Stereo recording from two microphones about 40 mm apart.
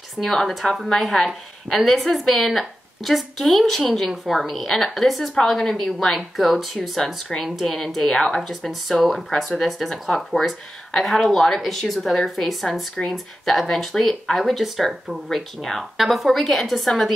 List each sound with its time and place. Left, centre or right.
0.2 s a woman's voice: centre
5.6 s a woman's voice: centre
15.2 s a woman's voice: centre